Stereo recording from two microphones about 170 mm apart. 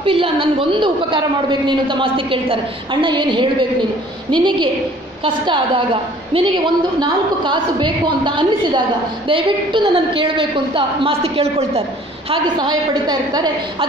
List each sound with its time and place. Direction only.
0.0 s a woman's voice: 30° right (ahead or behind)
12.3 s a woman's voice: 25° right (ahead or behind)